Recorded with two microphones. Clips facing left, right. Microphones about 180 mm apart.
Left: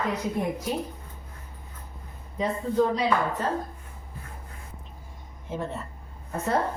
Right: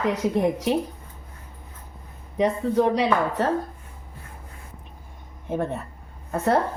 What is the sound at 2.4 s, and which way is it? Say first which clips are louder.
A woman's voice: right 3 dB; 75° right (ahead or behind).